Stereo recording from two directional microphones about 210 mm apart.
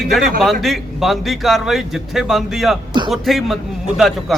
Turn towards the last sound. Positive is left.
turn(degrees=0)  # may be behind; listen again after turning